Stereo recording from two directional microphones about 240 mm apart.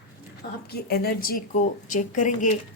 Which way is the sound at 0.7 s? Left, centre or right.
Left.